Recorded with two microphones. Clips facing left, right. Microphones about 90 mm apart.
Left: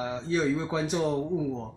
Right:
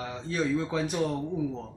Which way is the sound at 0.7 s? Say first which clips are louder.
Left 1 dB; 15° left (ahead or behind).